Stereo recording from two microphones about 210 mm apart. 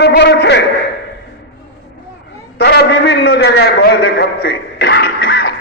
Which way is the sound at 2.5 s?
50° left (ahead or behind).